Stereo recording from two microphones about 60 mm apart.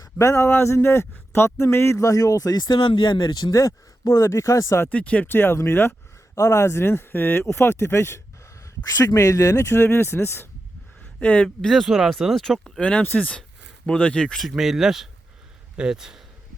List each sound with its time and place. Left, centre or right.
0.2 s speech: left
3.3 s speech: left
4.9 s speech: left
5.3 s speech: left
6.3 s speech: left
9.0 s speech: left
9.8 s speech: left
11.2 s speech: left
11.4 s speech: centre
12.3 s speech: centre
12.8 s speech: centre
14.5 s speech: centre